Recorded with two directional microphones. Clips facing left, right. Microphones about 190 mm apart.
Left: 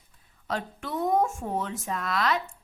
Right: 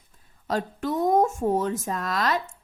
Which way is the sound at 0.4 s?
40° right (ahead or behind).